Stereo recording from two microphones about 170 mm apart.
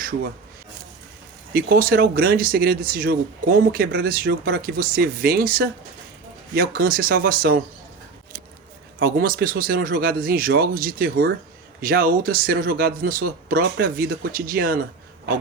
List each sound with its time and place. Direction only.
1.5 s speech: 60° right (ahead or behind)
9.0 s speech: 60° right (ahead or behind)